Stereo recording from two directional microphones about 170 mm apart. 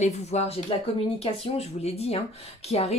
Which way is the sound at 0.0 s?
40° left (ahead or behind).